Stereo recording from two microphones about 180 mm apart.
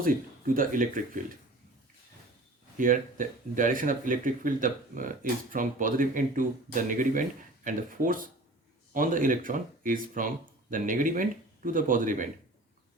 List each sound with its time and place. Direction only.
0.0 s speech: 50° right (ahead or behind)
2.7 s speech: 45° right (ahead or behind)